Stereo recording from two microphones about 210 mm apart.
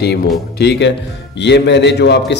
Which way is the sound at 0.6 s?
55° left (ahead or behind).